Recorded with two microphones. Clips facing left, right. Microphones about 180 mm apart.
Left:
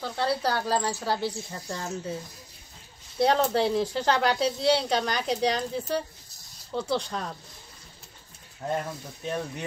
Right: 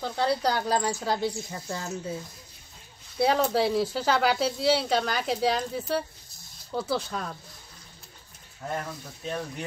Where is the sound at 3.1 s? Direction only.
5° right (ahead or behind).